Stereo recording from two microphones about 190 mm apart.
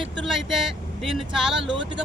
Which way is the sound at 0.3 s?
Centre (ahead or behind).